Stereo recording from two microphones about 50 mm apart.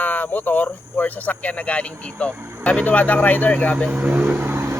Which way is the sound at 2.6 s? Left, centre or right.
Left.